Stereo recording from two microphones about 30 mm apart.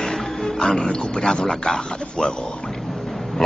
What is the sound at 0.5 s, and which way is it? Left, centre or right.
Speech, left.